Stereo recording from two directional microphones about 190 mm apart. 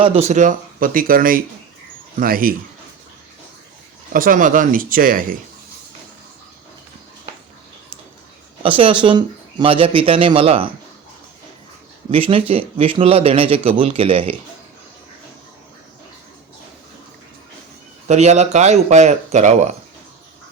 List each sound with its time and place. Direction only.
0.0 s speech: 30° right (ahead or behind); by 2.6 s 50° right (ahead or behind)
4.1 s speech: 45° right (ahead or behind)
8.6 s speech: 25° right (ahead or behind)
12.1 s speech: 30° right (ahead or behind)
18.1 s speech: 35° right (ahead or behind)